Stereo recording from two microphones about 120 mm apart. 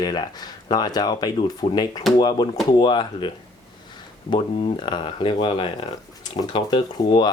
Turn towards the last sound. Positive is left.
turn(degrees=40)  # may be behind; listen again after turning